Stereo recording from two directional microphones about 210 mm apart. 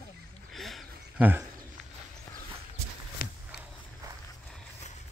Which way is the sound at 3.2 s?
45° left (ahead or behind).